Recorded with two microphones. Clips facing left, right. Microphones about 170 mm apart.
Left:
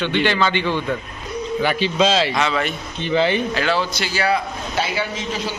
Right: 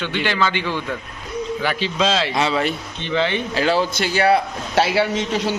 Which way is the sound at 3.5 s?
35° right (ahead or behind).